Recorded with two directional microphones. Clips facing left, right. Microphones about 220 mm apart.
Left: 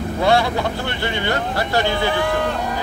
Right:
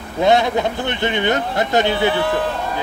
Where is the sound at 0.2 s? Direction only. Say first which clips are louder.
Right 3 dB; 20° right (ahead or behind).